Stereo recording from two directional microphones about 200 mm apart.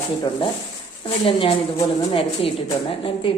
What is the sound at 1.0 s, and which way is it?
Speech, 25° left (ahead or behind).